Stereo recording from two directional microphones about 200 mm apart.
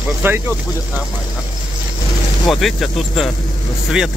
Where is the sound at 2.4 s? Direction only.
Centre (ahead or behind).